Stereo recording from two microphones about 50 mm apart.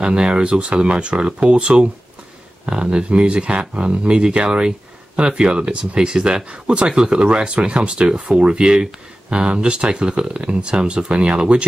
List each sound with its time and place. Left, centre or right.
0.0 s speech: centre